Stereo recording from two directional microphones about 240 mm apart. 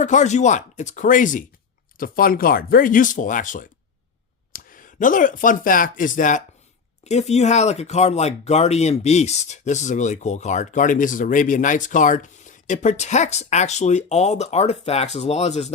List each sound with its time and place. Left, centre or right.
0.0 s speech: left